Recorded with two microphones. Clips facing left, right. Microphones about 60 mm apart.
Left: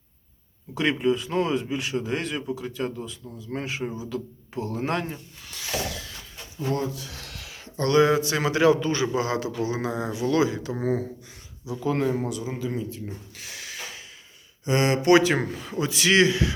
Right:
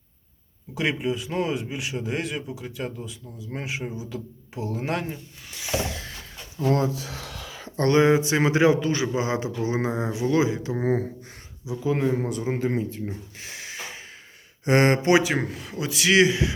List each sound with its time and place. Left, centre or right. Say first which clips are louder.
0.7 s a man's voice: left 3 dB; centre
5.5 s a sound: right 2 dB; centre
6.7 s speech: right 5 dB; right
7.8 s speech: right 1 dB; right
8.8 s a man's voice: even; centre
9.1 s speech: even; right
10.9 s speech: right 2 dB; right
11.8 s a man's voice: right 1 dB; centre
12.3 s speech: right 4 dB; right
13.1 s a sound: right 3 dB; right
14.6 s speech: right 3 dB; right
15.2 s a man's voice: left 2 dB; centre
16.2 s a man's voice: even; centre